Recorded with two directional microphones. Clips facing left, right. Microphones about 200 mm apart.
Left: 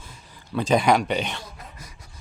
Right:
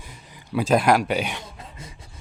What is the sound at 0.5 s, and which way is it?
Speech, 5° right (ahead or behind).